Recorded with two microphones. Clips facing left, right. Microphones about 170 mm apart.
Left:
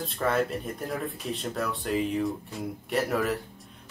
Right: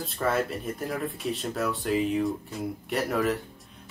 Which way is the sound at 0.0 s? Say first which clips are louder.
Even; centre (ahead or behind).